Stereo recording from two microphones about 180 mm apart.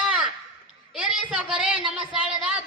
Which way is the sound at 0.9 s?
5° right (ahead or behind).